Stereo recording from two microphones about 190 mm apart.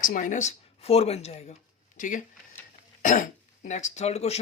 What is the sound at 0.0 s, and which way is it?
Speech, 45° left (ahead or behind).